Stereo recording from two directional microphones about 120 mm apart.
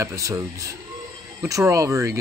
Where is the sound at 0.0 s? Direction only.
25° right (ahead or behind).